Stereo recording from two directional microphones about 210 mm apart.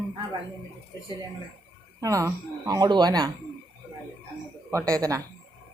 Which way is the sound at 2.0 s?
15° right (ahead or behind).